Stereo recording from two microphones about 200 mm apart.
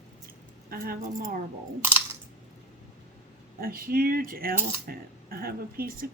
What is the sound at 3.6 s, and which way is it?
Coin, 45° right (ahead or behind).